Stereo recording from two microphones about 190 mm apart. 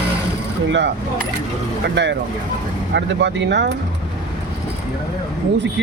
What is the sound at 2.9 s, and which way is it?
Speech, 65° right (ahead or behind).